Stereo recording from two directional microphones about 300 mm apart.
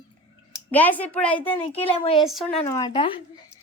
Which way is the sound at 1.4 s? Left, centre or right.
Centre.